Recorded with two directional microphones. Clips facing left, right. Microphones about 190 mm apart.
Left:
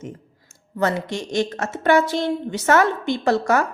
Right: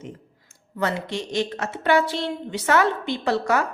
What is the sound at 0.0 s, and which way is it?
Speech, 45° left (ahead or behind).